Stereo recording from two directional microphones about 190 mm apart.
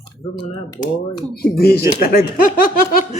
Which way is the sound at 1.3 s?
55° left (ahead or behind).